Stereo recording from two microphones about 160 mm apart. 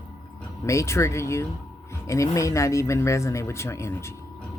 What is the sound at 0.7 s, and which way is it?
Speech, 20° left (ahead or behind).